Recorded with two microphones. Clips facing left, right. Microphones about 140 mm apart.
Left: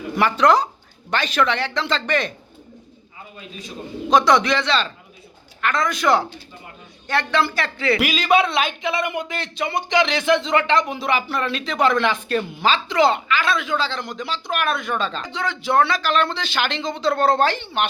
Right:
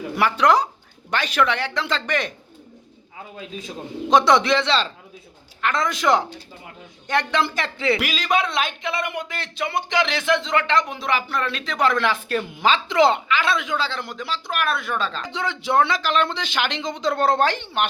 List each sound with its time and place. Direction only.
0.2 s speech: 10° right (ahead or behind)
4.1 s a man's voice: 25° right (ahead or behind)
8.3 s speech: 5° left (ahead or behind)
12.5 s speech: 15° right (ahead or behind)
15.3 s speech: 25° right (ahead or behind)